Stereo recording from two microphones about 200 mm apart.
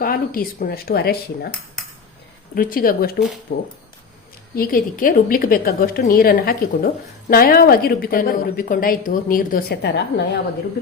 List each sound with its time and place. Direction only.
0.0 s a woman's voice: 45° left (ahead or behind)
2.6 s a woman's voice: 45° left (ahead or behind)